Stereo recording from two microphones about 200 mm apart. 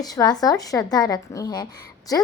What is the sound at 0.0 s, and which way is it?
A woman's voice, 20° left (ahead or behind).